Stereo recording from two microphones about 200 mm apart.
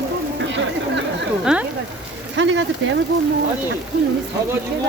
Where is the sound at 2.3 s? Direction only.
65° right (ahead or behind).